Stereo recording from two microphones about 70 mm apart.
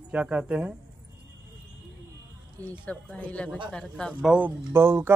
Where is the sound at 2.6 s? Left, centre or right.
Left.